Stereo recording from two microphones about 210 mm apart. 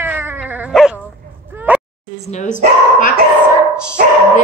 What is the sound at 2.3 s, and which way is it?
Dog, 35° left (ahead or behind).